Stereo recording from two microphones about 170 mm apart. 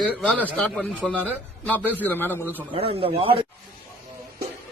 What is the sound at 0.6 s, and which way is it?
A man's voice, 10° left (ahead or behind).